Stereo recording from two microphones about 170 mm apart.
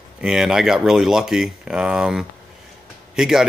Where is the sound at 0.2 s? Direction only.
5° right (ahead or behind).